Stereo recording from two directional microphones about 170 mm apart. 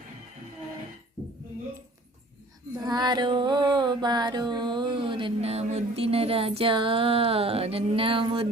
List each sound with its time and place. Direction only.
2.8 s female singing: 25° right (ahead or behind)